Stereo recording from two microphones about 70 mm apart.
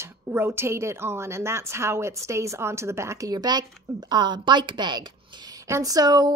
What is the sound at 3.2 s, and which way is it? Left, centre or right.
Speech, right.